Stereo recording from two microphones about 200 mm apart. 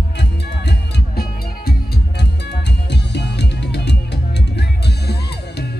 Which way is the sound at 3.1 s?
55° left (ahead or behind).